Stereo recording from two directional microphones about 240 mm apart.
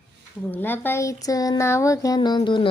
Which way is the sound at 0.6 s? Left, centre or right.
Centre.